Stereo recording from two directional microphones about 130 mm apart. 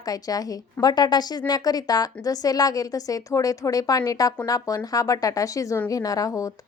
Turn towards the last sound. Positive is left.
turn(degrees=25)  # may be behind; listen again after turning